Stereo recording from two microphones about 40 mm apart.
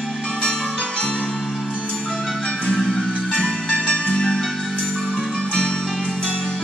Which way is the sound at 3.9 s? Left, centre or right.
Left.